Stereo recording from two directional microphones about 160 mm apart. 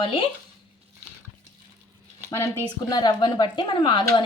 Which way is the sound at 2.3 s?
15° left (ahead or behind).